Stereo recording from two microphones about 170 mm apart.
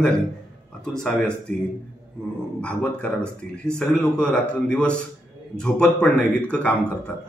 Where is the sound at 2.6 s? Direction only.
5° left (ahead or behind).